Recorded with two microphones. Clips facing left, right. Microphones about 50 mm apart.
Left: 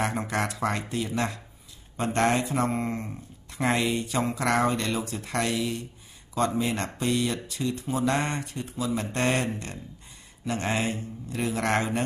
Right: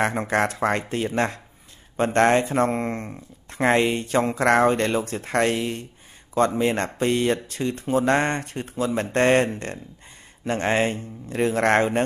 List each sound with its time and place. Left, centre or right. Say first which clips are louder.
0.0 s speech: right 6 dB; right